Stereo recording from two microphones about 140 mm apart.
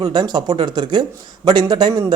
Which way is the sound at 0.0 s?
30° right (ahead or behind).